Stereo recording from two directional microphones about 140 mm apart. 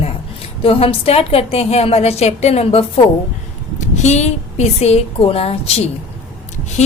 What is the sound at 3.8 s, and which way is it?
A woman's voice, 55° left (ahead or behind).